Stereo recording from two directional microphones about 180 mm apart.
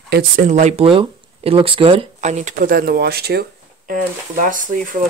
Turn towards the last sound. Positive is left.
turn(degrees=-45)  # may be behind; listen again after turning